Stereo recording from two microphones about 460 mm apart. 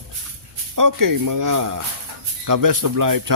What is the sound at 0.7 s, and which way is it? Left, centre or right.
Speech, right.